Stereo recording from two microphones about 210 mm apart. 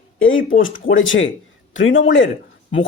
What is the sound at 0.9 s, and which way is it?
Speech, 65° left (ahead or behind).